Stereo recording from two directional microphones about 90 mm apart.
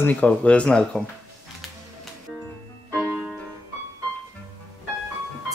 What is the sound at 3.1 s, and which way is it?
Music, 15° right (ahead or behind).